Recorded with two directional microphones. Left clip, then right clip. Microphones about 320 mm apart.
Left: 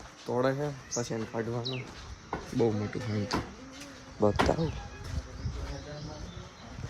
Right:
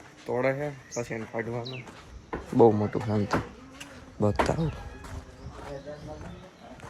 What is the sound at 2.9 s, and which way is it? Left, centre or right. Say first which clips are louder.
Speech: right 6 dB; centre.